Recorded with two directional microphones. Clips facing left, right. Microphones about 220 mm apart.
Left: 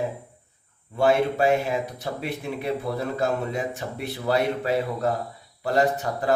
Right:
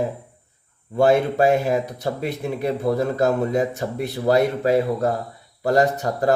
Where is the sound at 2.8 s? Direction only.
45° right (ahead or behind).